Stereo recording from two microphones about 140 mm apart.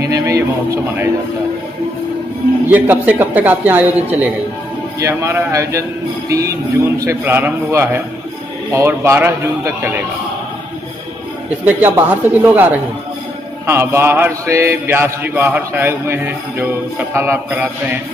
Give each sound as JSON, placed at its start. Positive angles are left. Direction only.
{"t": 0.0, "sound": "music", "side_deg": -25}
{"t": 2.6, "sound": "mantra", "side_deg": -15}
{"t": 5.0, "sound": "a man's voice", "side_deg": -20}
{"t": 7.1, "sound": "mantra", "side_deg": -15}
{"t": 8.7, "sound": "a man's voice", "side_deg": -20}
{"t": 11.6, "sound": "mantra", "side_deg": -10}